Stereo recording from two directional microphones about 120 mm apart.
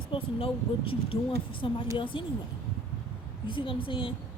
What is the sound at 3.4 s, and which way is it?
Speech, 45° left (ahead or behind).